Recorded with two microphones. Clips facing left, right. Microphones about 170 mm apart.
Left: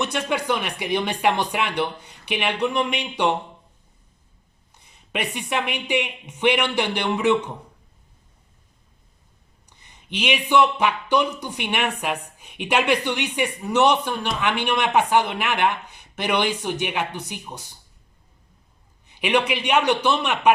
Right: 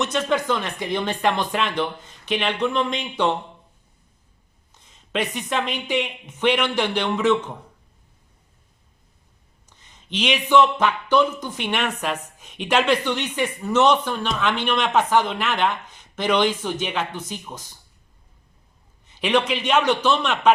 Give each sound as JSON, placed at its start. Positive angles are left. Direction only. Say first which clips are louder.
{"t": 0.0, "sound": "speech", "louder": "right 2 dB", "side_deg": 15}
{"t": 5.1, "sound": "speech", "louder": "right 2 dB", "side_deg": 15}
{"t": 9.6, "sound": "speech", "louder": "even", "side_deg": 15}
{"t": 19.0, "sound": "speech", "louder": "right 1 dB", "side_deg": 15}